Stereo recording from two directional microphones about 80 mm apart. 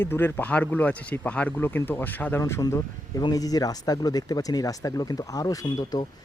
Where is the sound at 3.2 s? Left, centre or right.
Left.